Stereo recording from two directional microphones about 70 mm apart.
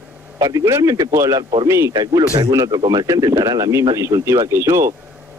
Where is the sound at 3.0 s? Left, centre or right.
Right.